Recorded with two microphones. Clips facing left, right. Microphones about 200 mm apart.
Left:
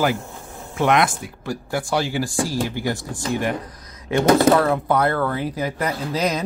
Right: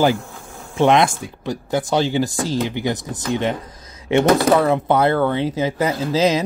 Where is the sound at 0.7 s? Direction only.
25° right (ahead or behind).